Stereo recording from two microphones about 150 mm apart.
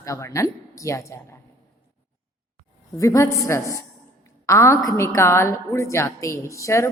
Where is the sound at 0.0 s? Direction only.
20° left (ahead or behind).